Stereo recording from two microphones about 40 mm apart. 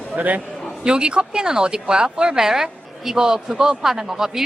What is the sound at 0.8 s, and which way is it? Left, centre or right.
Speech, right.